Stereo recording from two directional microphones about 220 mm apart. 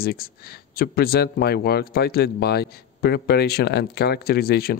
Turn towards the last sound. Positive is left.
turn(degrees=45)  # may be behind; listen again after turning